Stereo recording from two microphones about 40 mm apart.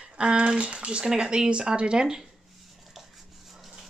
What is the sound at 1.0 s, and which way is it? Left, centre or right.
Speech, centre.